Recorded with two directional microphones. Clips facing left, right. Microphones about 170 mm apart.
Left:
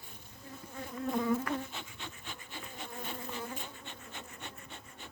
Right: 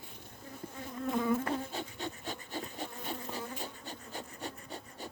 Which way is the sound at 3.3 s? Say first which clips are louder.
Right 1 dB; 35° right (ahead or behind).